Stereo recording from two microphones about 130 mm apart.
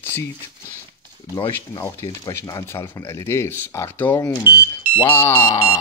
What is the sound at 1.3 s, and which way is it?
Speech, 30° left (ahead or behind).